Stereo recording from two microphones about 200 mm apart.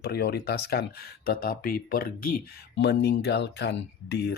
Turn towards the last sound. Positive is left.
turn(degrees=55)  # may be behind; listen again after turning